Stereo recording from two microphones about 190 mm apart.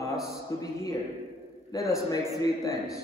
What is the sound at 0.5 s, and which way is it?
Speech, 20° left (ahead or behind).